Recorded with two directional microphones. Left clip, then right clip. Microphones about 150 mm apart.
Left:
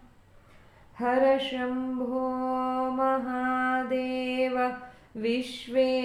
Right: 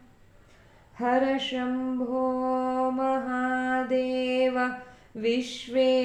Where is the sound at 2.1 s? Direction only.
25° right (ahead or behind).